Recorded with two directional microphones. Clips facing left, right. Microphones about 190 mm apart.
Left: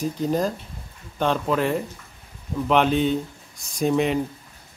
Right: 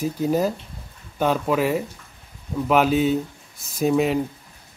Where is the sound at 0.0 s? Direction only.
5° right (ahead or behind).